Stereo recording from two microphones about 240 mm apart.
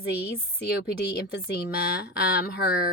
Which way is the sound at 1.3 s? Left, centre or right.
Left.